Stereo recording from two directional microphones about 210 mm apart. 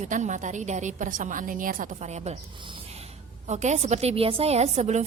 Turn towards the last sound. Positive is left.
turn(degrees=-35)  # may be behind; listen again after turning